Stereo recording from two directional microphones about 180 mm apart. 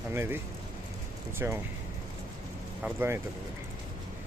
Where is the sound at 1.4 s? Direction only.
15° right (ahead or behind).